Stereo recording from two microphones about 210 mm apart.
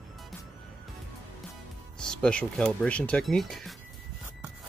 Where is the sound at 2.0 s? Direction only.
5° left (ahead or behind).